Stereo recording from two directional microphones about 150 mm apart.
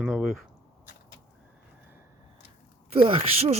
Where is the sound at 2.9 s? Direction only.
40° right (ahead or behind).